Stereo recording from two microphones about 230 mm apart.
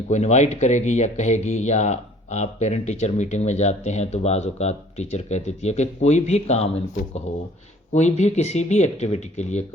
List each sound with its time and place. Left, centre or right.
0.1 s speech: left